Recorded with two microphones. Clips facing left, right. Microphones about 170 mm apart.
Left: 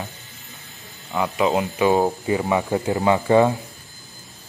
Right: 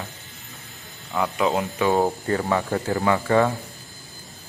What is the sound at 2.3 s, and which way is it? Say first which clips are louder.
Speech: left 2 dB; 15° left (ahead or behind).